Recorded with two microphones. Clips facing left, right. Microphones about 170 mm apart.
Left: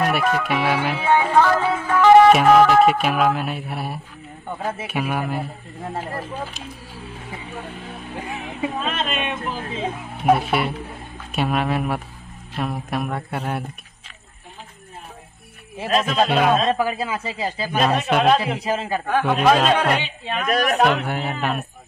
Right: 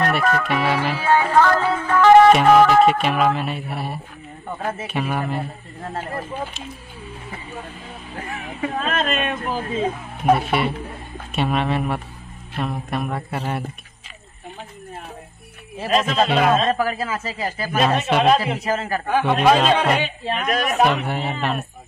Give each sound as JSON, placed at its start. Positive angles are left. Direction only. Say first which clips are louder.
{"t": 0.0, "sound": "music", "louder": "even", "side_deg": 5}
{"t": 9.0, "sound": "music", "louder": "right 2 dB", "side_deg": 0}
{"t": 9.6, "sound": "a woman's voice", "louder": "right 4 dB", "side_deg": 0}
{"t": 12.5, "sound": "music", "louder": "even", "side_deg": 0}
{"t": 15.8, "sound": "music", "louder": "even", "side_deg": 0}
{"t": 16.7, "sound": "speech", "louder": "even", "side_deg": 25}
{"t": 17.6, "sound": "music", "louder": "right 1 dB", "side_deg": 0}
{"t": 18.7, "sound": "speech", "louder": "even", "side_deg": 20}
{"t": 19.0, "sound": "music", "louder": "right 1 dB", "side_deg": 0}